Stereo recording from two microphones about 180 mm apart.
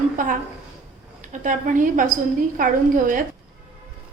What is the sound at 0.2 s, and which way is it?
A woman's voice, 45° right (ahead or behind).